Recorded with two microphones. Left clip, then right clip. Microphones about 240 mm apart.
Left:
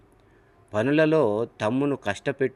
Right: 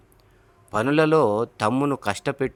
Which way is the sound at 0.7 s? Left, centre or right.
Centre.